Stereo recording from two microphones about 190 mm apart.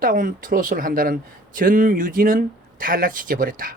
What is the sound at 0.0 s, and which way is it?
A man's voice, 45° right (ahead or behind).